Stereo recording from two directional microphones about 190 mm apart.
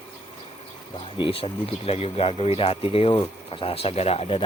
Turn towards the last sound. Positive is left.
turn(degrees=30)  # may be behind; listen again after turning